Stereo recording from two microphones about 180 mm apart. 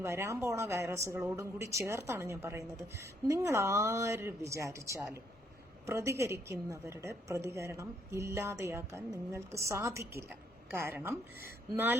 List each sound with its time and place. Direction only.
0.0 s a woman's voice: 15° right (ahead or behind)